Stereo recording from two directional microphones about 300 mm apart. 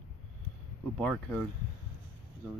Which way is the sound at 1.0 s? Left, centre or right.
Centre.